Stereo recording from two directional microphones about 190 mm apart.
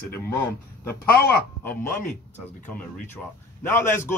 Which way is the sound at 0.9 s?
55° left (ahead or behind).